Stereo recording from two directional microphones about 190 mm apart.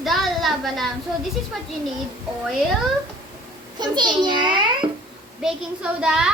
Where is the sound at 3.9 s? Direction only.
20° right (ahead or behind).